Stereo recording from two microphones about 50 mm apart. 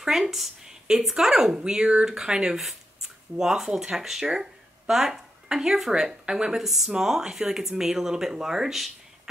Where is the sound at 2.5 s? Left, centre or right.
Centre.